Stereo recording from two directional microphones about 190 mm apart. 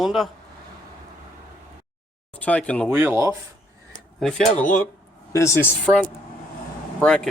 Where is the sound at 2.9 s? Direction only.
10° right (ahead or behind).